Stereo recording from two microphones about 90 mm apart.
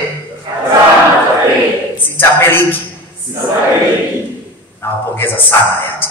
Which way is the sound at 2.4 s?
25° left (ahead or behind).